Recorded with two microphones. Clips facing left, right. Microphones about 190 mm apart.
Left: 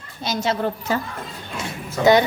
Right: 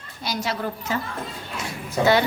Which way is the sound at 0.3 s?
25° left (ahead or behind).